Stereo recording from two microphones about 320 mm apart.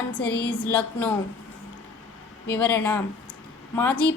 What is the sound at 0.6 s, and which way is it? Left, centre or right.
Speech, centre.